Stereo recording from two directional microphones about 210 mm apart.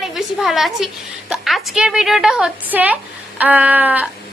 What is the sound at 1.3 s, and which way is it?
A woman's voice, centre (ahead or behind).